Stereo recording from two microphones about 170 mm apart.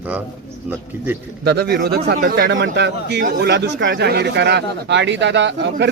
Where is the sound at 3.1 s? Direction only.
65° right (ahead or behind).